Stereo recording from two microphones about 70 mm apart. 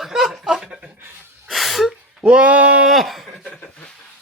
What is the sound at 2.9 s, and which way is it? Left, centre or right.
Speech, centre.